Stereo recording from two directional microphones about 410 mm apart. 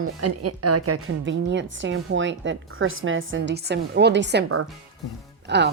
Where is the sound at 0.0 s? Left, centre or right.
Right.